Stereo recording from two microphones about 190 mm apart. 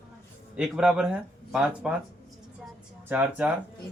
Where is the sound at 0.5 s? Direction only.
5° right (ahead or behind).